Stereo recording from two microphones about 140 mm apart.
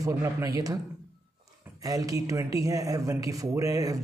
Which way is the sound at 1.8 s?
25° right (ahead or behind).